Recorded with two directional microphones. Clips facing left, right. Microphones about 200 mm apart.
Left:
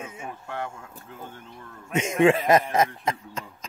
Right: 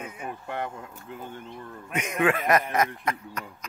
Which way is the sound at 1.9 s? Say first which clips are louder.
Left 5 dB; 25° left (ahead or behind).